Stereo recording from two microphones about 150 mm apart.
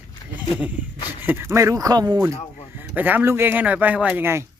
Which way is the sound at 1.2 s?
15° right (ahead or behind).